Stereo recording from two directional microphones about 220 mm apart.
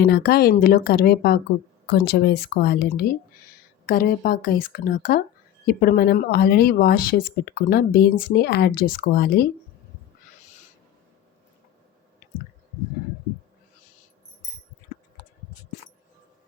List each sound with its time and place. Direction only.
0.0 s speech: 45° left (ahead or behind)